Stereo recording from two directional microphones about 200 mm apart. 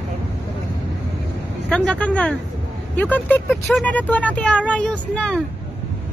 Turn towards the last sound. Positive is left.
turn(degrees=5)  # may be behind; listen again after turning